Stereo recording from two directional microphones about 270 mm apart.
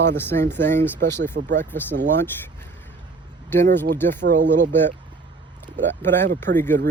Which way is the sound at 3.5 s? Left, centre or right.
Centre.